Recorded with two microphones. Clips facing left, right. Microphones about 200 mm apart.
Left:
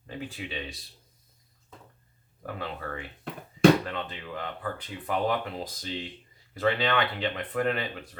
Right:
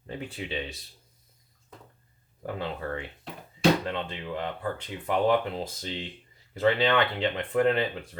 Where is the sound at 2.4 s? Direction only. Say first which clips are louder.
Right 3 dB; 30° right (ahead or behind).